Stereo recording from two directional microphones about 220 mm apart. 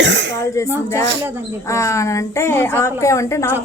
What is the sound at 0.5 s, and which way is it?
Speech, 15° left (ahead or behind).